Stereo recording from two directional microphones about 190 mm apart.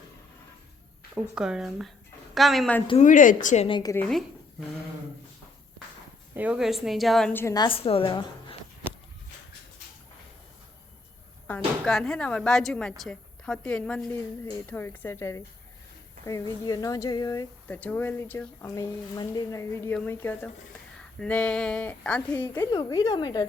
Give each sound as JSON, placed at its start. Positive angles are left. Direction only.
{"t": 1.1, "sound": "a woman's voice", "side_deg": -5}
{"t": 3.0, "sound": "a woman's voice", "side_deg": 45}
{"t": 6.3, "sound": "a woman's voice", "side_deg": -5}
{"t": 7.4, "sound": "a woman's voice", "side_deg": 20}
{"t": 11.4, "sound": "a woman's voice", "side_deg": 5}
{"t": 22.6, "sound": "a woman's voice", "side_deg": 20}